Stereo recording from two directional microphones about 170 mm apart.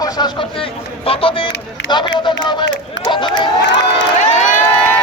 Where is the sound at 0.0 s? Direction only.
25° left (ahead or behind).